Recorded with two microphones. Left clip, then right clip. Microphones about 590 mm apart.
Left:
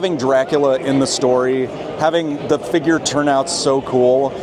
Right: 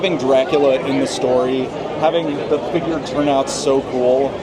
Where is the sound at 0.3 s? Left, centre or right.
Left.